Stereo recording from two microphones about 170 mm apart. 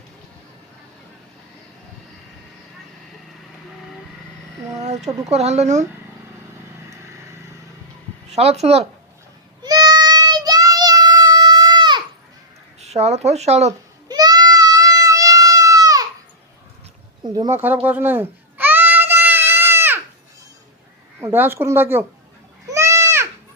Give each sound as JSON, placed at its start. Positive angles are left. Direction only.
{"t": 4.8, "sound": "speech", "side_deg": -40}
{"t": 8.3, "sound": "speech", "side_deg": -40}
{"t": 9.6, "sound": "child singing", "side_deg": -25}
{"t": 12.8, "sound": "speech", "side_deg": -40}
{"t": 14.1, "sound": "goat", "side_deg": -25}
{"t": 17.2, "sound": "speech", "side_deg": -25}
{"t": 17.8, "sound": "a sound", "side_deg": -10}
{"t": 21.2, "sound": "speech", "side_deg": -15}
{"t": 22.6, "sound": "goat", "side_deg": -15}